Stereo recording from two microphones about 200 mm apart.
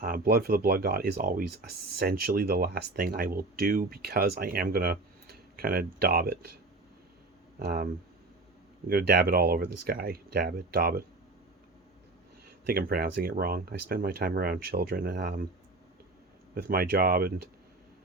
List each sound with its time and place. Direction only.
0.0 s speech: 50° right (ahead or behind)
7.6 s speech: 50° right (ahead or behind)
8.9 s speech: 50° right (ahead or behind)
12.6 s speech: 50° right (ahead or behind)
16.6 s speech: 50° right (ahead or behind)